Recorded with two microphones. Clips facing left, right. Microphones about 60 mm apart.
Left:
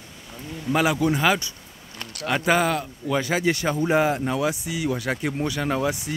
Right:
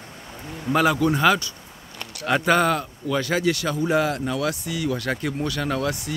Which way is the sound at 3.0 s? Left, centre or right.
Centre.